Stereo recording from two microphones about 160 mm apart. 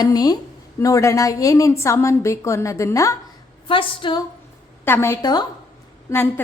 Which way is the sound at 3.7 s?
30° left (ahead or behind).